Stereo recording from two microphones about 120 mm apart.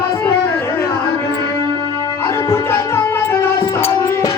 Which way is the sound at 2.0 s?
20° left (ahead or behind).